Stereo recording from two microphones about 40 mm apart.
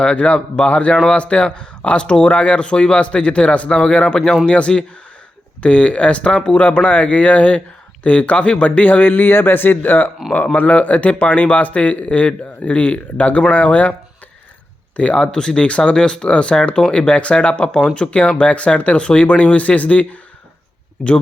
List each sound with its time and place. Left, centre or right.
0.0 s speech: left
6.7 s speech: left
10.3 s speech: left
14.9 s speech: left
15.3 s speech: left